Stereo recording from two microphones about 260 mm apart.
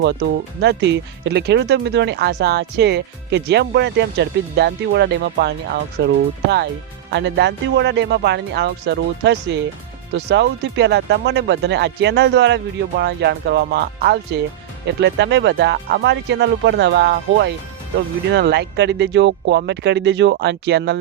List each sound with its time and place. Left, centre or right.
0.0 s speech: right
7.1 s speech: right